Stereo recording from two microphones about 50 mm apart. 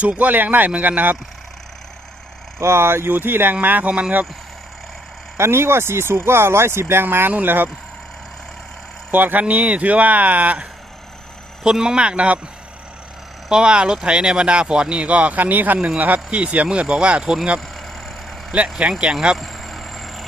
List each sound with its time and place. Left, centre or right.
0.0 s speech: right
2.6 s speech: right
5.4 s speech: right
9.1 s speech: right
11.6 s speech: centre
13.5 s speech: centre
18.9 s speech: right
19.4 s vehicle: centre